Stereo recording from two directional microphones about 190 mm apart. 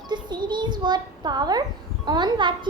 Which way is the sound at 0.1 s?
25° right (ahead or behind).